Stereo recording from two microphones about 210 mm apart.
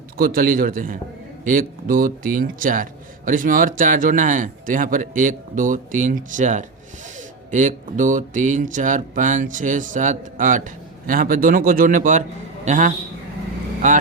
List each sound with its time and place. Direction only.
0.2 s a man's voice: 45° right (ahead or behind)